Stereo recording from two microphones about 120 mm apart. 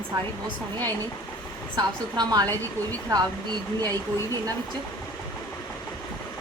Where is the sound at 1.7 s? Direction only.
35° right (ahead or behind).